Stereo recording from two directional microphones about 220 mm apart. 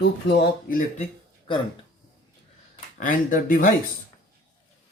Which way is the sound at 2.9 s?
40° left (ahead or behind).